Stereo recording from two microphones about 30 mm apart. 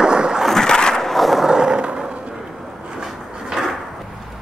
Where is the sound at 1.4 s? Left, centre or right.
Right.